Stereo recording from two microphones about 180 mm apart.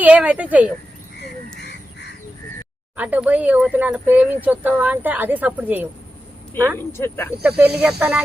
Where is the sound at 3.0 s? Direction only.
5° right (ahead or behind).